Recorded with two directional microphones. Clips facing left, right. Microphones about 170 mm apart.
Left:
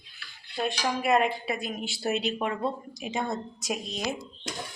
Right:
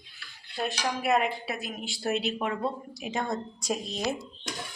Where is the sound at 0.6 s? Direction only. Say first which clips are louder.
Left 2 dB; centre (ahead or behind).